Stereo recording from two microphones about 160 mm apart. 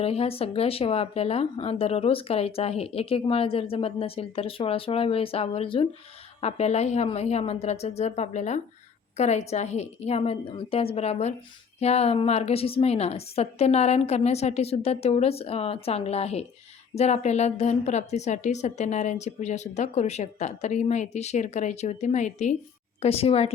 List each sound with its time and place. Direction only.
0.0 s a woman's voice: 40° left (ahead or behind)